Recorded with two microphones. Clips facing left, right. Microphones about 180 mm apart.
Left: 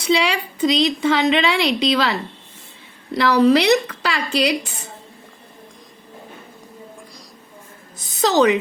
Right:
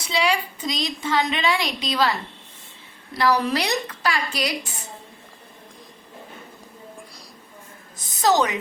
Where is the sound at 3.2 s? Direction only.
70° left (ahead or behind).